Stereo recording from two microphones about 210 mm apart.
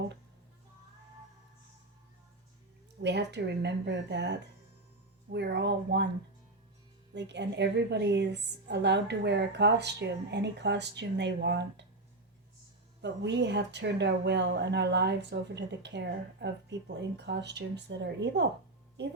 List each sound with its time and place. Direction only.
3.0 s a woman's voice: 55° right (ahead or behind)
7.1 s a woman's voice: 55° right (ahead or behind)
13.0 s a woman's voice: 55° right (ahead or behind)